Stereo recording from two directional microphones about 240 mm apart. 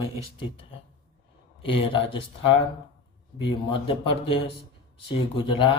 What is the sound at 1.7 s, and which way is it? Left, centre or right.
Speech, left.